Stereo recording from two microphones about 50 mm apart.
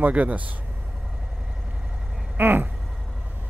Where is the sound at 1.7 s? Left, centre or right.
Centre.